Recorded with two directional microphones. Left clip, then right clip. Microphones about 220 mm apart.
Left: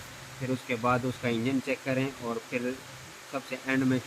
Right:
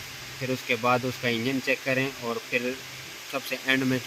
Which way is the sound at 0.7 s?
25° right (ahead or behind).